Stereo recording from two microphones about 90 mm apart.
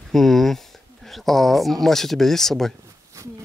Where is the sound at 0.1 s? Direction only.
5° left (ahead or behind).